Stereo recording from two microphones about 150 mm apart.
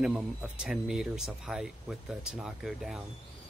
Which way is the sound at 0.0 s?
5° right (ahead or behind).